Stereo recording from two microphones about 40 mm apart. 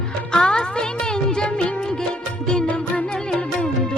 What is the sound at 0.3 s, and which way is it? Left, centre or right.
Music, centre.